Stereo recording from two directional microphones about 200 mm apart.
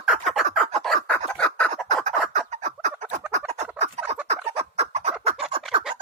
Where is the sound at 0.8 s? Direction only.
5° left (ahead or behind).